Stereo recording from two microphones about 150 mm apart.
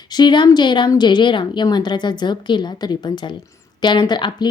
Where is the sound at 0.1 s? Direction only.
30° left (ahead or behind).